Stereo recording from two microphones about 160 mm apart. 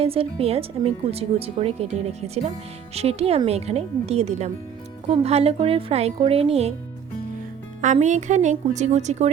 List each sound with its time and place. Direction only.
0.0 s speech: 35° right (ahead or behind)
8.0 s a woman's voice: 50° right (ahead or behind)